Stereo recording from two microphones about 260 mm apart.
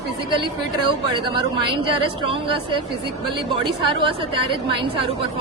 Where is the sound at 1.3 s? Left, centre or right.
Centre.